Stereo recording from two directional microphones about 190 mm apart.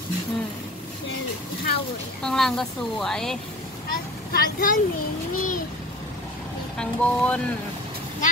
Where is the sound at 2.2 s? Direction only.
5° left (ahead or behind).